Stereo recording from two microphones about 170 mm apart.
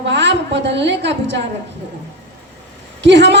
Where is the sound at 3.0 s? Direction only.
90° right.